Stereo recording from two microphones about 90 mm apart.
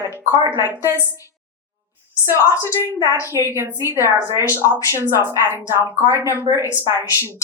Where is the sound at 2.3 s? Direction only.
35° left (ahead or behind).